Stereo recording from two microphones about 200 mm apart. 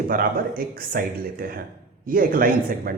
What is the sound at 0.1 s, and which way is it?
A man's voice, 45° right (ahead or behind).